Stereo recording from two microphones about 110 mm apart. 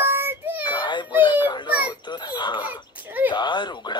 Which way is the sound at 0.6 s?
45° left (ahead or behind).